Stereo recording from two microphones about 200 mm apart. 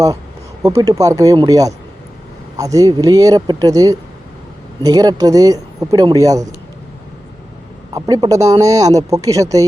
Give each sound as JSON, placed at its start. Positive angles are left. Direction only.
{"t": 0.8, "sound": "speech", "side_deg": -15}
{"t": 7.9, "sound": "speech", "side_deg": -20}